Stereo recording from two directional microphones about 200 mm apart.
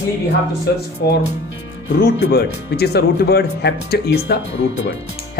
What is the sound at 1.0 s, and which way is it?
Speech, 55° left (ahead or behind).